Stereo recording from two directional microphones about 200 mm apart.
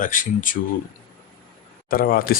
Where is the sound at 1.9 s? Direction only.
45° left (ahead or behind).